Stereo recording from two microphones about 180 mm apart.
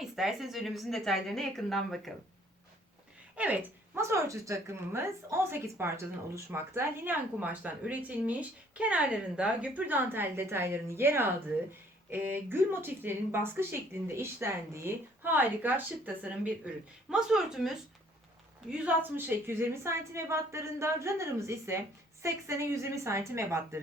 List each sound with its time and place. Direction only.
0.0 s a woman's voice: centre (ahead or behind)
3.3 s a woman's voice: 10° right (ahead or behind)